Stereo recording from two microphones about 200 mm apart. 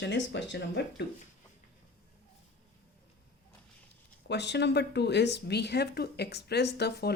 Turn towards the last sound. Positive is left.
turn(degrees=55)  # may be behind; listen again after turning